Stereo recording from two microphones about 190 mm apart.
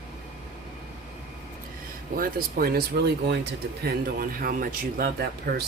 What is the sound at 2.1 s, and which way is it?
Speech, 50° right (ahead or behind).